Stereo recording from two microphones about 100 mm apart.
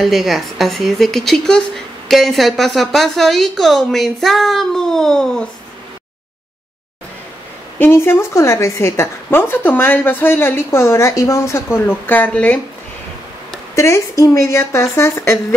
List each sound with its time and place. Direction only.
0.0 s a woman's voice: centre (ahead or behind)
7.8 s a woman's voice: 20° left (ahead or behind)
13.7 s a woman's voice: 30° left (ahead or behind)